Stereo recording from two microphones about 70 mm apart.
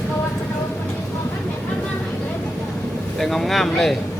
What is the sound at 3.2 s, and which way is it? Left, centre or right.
Speech, centre.